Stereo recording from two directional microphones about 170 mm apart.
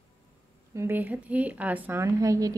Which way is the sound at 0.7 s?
15° right (ahead or behind).